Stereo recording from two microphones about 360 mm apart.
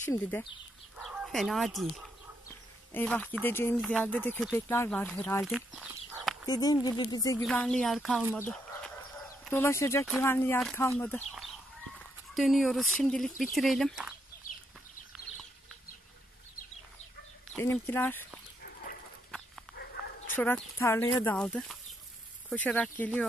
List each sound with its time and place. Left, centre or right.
0.1 s speech: centre
2.9 s speech: centre
6.4 s speech: centre
8.4 s a sound: centre
9.4 s speech: centre
17.5 s speech: centre
19.7 s dog: left
20.3 s speech: centre